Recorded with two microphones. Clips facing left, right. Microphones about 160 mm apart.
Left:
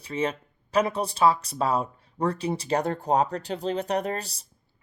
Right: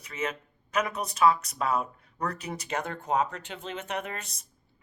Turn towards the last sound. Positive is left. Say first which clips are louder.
# left 7 dB
turn(degrees=35)  # may be behind; listen again after turning